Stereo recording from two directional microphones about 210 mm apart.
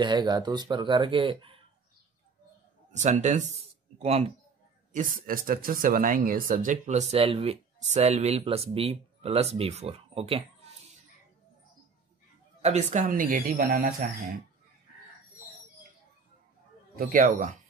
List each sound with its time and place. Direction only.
0.0 s speech: 20° right (ahead or behind)
2.9 s speech: 35° right (ahead or behind)
4.9 s speech: 40° right (ahead or behind)
12.6 s speech: 35° right (ahead or behind)
16.9 s speech: 40° right (ahead or behind)